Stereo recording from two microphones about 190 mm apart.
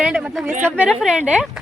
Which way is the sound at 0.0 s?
5° right (ahead or behind).